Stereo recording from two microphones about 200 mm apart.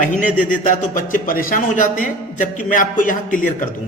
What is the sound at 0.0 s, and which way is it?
A man's voice, 40° left (ahead or behind).